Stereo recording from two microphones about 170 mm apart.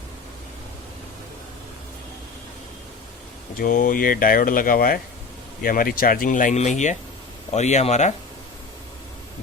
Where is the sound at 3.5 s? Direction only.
55° left (ahead or behind).